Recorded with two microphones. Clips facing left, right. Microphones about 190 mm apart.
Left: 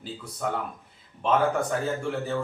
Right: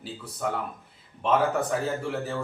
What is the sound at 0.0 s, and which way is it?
Speech, centre (ahead or behind).